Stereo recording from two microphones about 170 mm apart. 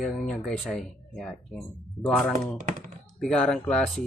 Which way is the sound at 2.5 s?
50° right (ahead or behind).